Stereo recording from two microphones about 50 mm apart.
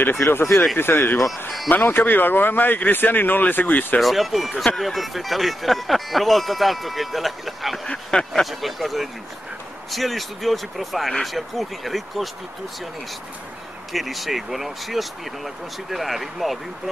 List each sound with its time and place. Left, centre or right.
0.2 s a man's voice: left
4.0 s speech: centre
7.9 s a sound: centre
8.3 s speech: centre
13.9 s speech: centre